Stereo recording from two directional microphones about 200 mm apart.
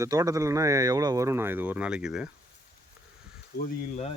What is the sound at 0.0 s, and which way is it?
Speech, 15° right (ahead or behind).